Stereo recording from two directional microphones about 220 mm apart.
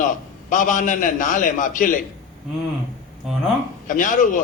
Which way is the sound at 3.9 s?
35° left (ahead or behind).